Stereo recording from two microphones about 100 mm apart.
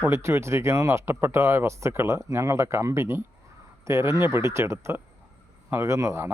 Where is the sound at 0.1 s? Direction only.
25° right (ahead or behind).